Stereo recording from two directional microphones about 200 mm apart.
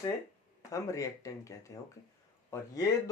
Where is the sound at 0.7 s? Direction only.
15° left (ahead or behind).